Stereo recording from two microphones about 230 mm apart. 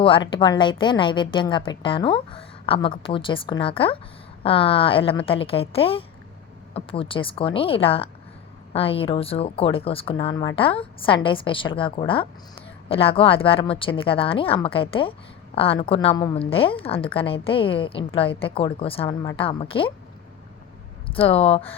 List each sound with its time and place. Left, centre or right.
0.0 s a woman's voice: left
21.1 s a woman's voice: left